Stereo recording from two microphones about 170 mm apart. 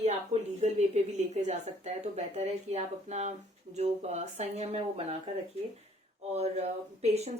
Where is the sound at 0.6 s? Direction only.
40° right (ahead or behind).